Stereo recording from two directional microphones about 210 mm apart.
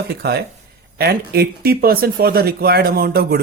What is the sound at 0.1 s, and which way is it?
Speech, 50° right (ahead or behind).